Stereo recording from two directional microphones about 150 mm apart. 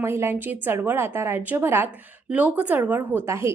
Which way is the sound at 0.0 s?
15° right (ahead or behind).